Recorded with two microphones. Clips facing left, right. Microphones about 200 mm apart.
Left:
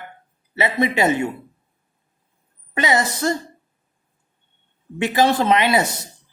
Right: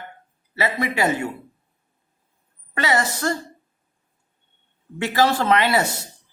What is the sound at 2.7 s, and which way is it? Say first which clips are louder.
Speech: left 2 dB; 20° left (ahead or behind).